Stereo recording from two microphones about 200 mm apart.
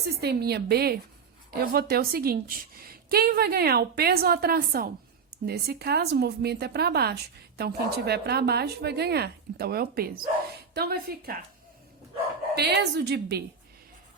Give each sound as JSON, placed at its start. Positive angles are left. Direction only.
{"t": 0.0, "sound": "speech", "side_deg": -55}
{"t": 12.5, "sound": "a woman's voice", "side_deg": -55}